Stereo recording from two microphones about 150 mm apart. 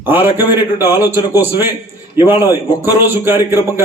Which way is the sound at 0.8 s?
15° right (ahead or behind).